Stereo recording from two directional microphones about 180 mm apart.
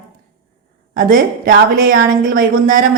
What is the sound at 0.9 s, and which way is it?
A woman's voice, 50° right (ahead or behind).